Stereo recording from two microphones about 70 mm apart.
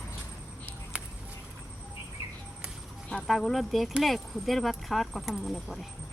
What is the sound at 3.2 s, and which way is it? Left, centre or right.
Speech, centre.